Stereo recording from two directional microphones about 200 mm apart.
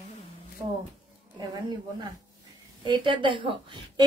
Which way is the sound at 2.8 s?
25° right (ahead or behind).